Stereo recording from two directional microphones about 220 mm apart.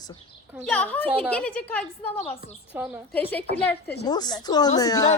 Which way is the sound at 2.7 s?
5° right (ahead or behind).